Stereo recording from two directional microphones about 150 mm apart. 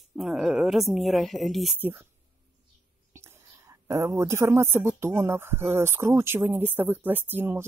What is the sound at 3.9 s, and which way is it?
A woman's voice, 20° right (ahead or behind).